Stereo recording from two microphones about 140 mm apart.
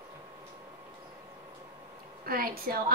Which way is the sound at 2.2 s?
90° right.